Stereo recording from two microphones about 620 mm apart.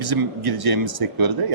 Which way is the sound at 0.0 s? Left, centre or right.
Right.